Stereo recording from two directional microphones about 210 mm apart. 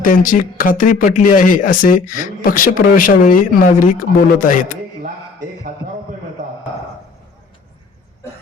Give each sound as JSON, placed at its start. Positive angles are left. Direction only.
{"t": 0.0, "sound": "speech", "side_deg": 40}